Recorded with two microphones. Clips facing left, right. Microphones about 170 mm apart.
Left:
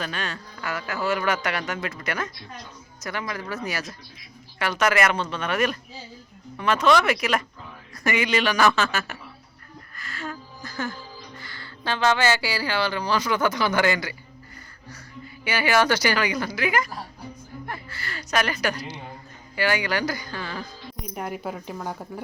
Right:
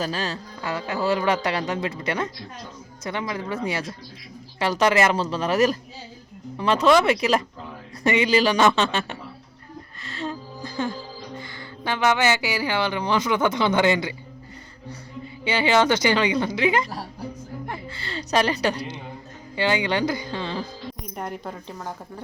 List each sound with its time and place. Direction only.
0.0 s speech: 35° right (ahead or behind)
10.2 s music: 20° right (ahead or behind)
11.3 s speech: 20° right (ahead or behind)
15.4 s speech: 25° right (ahead or behind)
21.2 s speech: 5° left (ahead or behind)